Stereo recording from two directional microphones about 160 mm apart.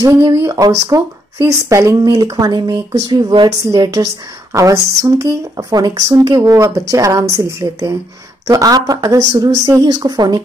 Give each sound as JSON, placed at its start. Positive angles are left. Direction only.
{"t": 0.0, "sound": "speech", "side_deg": -25}